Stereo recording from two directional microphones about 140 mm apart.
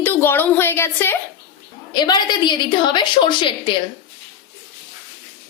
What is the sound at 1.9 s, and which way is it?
A woman's voice, 30° left (ahead or behind).